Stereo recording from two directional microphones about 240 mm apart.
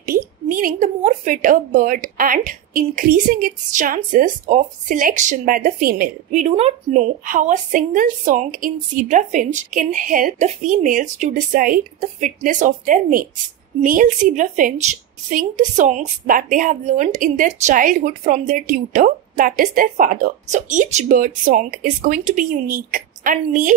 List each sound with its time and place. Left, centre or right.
0.0 s a woman's voice: right